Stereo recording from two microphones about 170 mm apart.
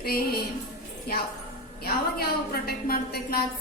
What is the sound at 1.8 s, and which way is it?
A woman's voice, 65° left (ahead or behind).